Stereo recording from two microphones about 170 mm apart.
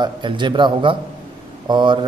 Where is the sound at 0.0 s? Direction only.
25° right (ahead or behind).